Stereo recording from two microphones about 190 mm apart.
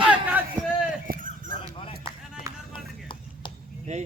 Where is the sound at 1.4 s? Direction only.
30° left (ahead or behind).